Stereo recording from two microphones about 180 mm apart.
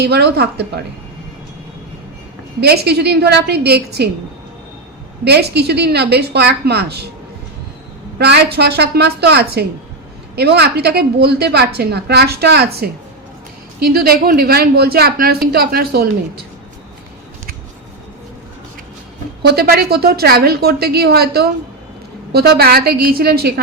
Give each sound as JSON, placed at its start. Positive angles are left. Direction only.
{"t": 0.0, "sound": "a woman's voice", "side_deg": -65}
{"t": 2.6, "sound": "a woman's voice", "side_deg": -65}
{"t": 5.2, "sound": "a woman's voice", "side_deg": -65}
{"t": 8.2, "sound": "a woman's voice", "side_deg": -65}
{"t": 13.9, "sound": "a woman's voice", "side_deg": -55}
{"t": 19.4, "sound": "a woman's voice", "side_deg": -60}